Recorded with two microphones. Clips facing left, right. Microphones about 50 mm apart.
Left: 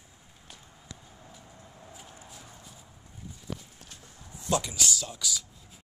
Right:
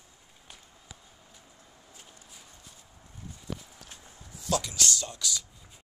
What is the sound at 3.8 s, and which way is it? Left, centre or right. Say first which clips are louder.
Horse: even; right.